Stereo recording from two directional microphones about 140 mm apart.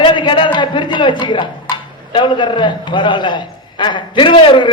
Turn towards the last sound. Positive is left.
turn(degrees=35)  # may be behind; listen again after turning